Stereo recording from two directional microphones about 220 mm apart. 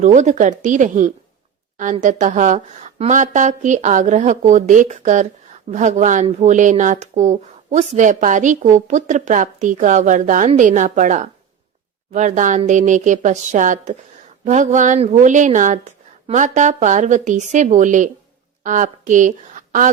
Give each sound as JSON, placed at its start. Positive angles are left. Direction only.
{"t": 0.0, "sound": "a woman's voice", "side_deg": -35}